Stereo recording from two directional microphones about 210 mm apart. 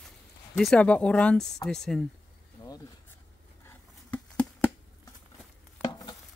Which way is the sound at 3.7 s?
5° left (ahead or behind).